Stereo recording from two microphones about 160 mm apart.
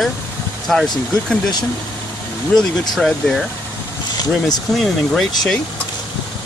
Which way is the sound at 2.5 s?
5° left (ahead or behind).